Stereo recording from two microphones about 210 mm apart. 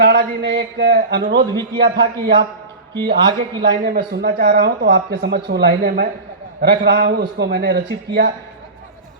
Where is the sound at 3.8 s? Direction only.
45° right (ahead or behind).